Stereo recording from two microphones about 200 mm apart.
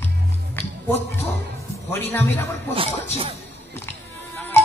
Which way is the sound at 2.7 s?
30° right (ahead or behind).